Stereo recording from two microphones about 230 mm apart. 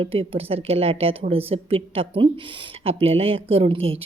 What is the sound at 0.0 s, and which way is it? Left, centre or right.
A woman's voice, right.